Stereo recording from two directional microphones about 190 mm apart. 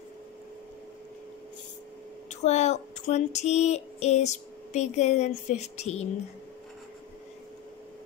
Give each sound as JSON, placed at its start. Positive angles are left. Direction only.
{"t": 2.2, "sound": "child singing", "side_deg": 35}